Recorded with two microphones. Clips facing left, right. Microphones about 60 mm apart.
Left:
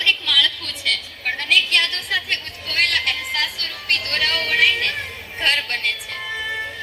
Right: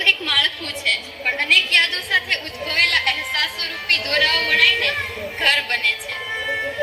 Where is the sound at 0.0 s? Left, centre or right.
Right.